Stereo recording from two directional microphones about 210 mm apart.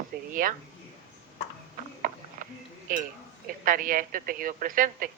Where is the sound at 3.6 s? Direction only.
40° right (ahead or behind).